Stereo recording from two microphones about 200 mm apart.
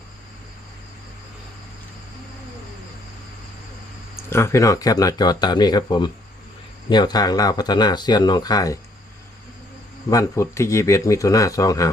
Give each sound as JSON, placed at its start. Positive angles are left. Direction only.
{"t": 4.2, "sound": "speech", "side_deg": 15}
{"t": 10.1, "sound": "speech", "side_deg": 15}